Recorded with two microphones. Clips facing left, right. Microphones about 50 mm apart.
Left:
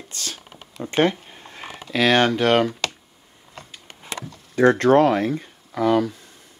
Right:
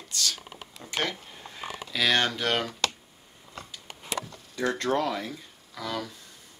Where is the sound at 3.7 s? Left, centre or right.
Left.